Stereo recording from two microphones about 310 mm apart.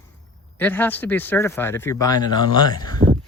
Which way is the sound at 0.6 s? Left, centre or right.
Centre.